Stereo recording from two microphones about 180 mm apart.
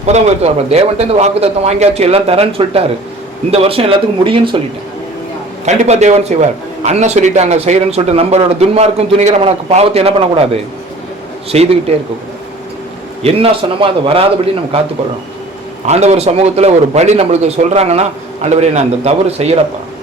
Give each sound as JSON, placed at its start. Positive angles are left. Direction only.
{"t": 0.0, "sound": "a man's voice", "side_deg": -35}
{"t": 5.6, "sound": "a man's voice", "side_deg": -40}
{"t": 13.2, "sound": "a man's voice", "side_deg": -30}
{"t": 15.9, "sound": "a man's voice", "side_deg": -40}